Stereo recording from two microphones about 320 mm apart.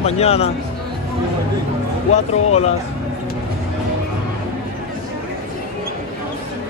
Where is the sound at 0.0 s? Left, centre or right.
Centre.